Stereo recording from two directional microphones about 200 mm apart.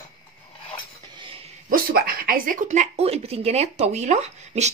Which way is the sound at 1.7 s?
45° right (ahead or behind).